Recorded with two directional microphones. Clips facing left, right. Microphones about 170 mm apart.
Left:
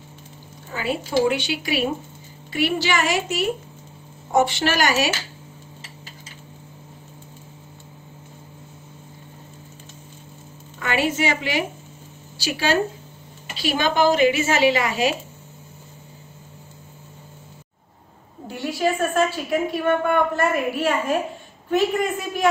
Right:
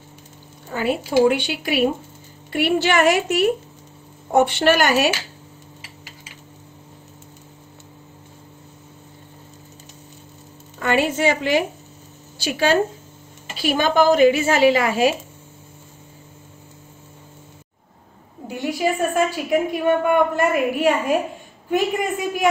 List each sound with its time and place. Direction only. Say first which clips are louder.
0.7 s a woman's voice: right 4 dB; 45° right (ahead or behind)
10.8 s a woman's voice: right 3 dB; 45° right (ahead or behind)
18.5 s a woman's voice: right 1 dB; 15° right (ahead or behind)